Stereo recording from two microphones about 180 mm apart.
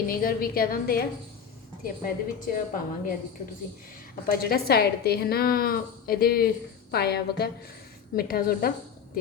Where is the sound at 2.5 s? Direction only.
50° left (ahead or behind).